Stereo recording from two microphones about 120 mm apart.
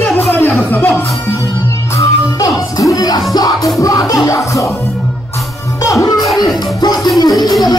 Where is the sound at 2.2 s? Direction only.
30° left (ahead or behind).